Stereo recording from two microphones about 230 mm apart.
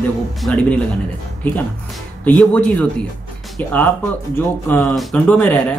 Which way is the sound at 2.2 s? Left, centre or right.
Centre.